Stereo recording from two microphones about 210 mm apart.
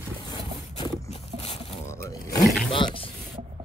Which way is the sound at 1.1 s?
30° left (ahead or behind).